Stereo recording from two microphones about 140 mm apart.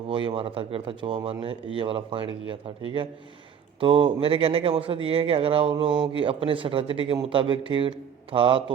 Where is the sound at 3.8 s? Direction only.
40° right (ahead or behind).